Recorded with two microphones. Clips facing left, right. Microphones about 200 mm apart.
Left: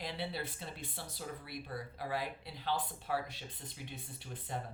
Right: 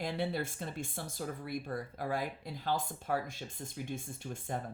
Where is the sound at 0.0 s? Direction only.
45° right (ahead or behind).